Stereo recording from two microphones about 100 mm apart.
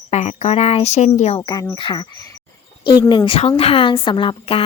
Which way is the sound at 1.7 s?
55° left (ahead or behind).